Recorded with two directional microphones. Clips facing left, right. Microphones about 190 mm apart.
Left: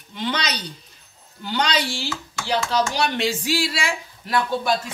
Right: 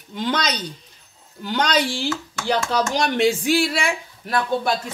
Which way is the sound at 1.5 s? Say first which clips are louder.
Right 2 dB; 45° right (ahead or behind).